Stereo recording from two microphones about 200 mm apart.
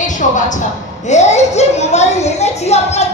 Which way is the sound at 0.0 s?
40° left (ahead or behind).